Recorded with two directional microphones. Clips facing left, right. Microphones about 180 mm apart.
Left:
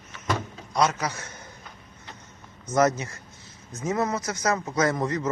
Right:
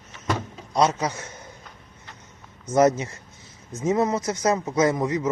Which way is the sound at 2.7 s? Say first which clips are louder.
Right 3 dB; 20° right (ahead or behind).